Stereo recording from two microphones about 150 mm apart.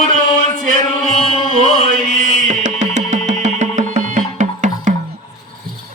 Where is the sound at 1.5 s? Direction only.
60° right (ahead or behind).